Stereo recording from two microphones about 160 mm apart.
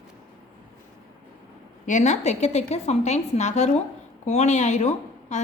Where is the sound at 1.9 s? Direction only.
50° left (ahead or behind).